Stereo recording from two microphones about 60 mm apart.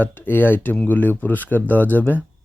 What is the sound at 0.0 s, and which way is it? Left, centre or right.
Speech, left.